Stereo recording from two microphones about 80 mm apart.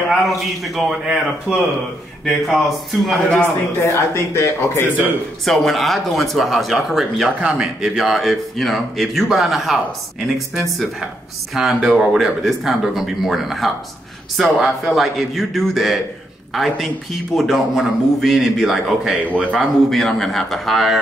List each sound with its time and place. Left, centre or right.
0.1 s a man's voice: centre
3.8 s speech: left
5.4 s a man's voice: centre
7.2 s a man's voice: centre